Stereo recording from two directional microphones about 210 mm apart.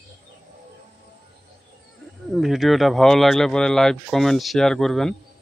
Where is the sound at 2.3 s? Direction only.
Centre (ahead or behind).